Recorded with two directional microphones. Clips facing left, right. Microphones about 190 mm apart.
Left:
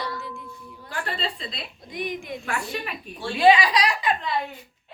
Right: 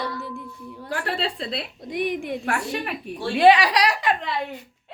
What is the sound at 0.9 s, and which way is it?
A woman's voice, 75° right (ahead or behind).